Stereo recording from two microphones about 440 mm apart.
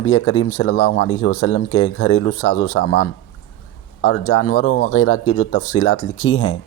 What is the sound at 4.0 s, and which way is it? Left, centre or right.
Speech, left.